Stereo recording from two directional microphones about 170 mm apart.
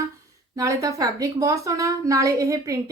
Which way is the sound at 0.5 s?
20° right (ahead or behind).